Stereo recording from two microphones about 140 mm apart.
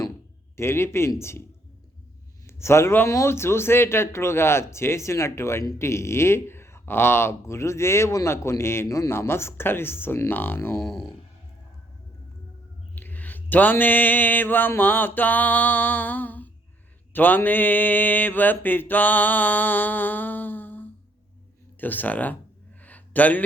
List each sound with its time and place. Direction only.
0.5 s speech: 20° left (ahead or behind)
2.5 s speech: 20° left (ahead or behind)
10.8 s speech: 5° left (ahead or behind)
13.0 s speech: 15° left (ahead or behind)
22.8 s a sound: 10° left (ahead or behind)